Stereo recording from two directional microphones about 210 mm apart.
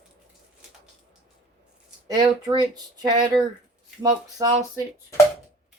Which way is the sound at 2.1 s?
20° right (ahead or behind).